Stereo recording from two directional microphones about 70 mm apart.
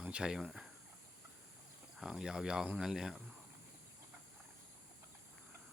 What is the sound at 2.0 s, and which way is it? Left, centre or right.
Speech, centre.